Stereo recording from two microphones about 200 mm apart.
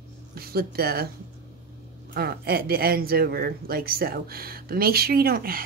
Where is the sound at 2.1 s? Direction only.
50° right (ahead or behind).